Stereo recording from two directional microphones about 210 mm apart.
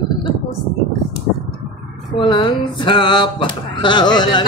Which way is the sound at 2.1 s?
20° left (ahead or behind).